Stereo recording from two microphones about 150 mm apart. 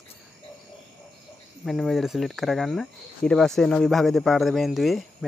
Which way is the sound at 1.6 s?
Centre (ahead or behind).